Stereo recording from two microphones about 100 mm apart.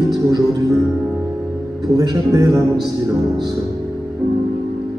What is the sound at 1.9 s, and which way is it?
Speech, 40° right (ahead or behind).